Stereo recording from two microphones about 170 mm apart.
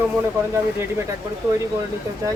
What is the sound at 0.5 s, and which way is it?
Speech, 15° right (ahead or behind).